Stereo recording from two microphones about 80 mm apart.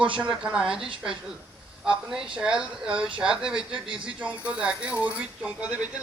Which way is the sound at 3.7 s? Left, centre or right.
Right.